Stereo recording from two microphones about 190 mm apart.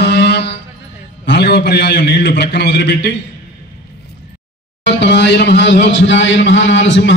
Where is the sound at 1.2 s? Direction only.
65° left (ahead or behind).